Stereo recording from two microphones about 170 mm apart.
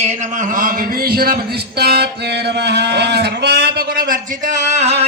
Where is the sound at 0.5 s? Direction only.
60° right (ahead or behind).